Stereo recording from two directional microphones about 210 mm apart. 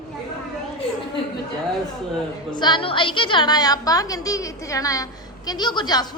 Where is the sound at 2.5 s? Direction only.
20° left (ahead or behind).